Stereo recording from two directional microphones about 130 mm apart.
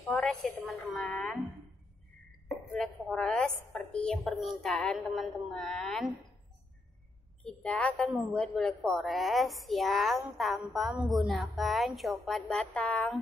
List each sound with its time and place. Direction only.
0.0 s a sound: centre (ahead or behind)
0.9 s a woman's voice: 5° left (ahead or behind)
2.4 s a woman's voice: centre (ahead or behind)
7.4 s a woman's voice: 5° left (ahead or behind)